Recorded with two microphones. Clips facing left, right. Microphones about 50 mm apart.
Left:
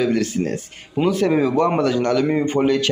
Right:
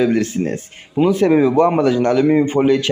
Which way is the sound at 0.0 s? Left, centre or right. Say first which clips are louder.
Right 3 dB; right.